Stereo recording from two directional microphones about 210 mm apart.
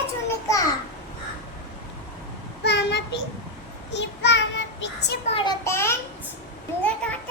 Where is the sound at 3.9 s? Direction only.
55° left (ahead or behind).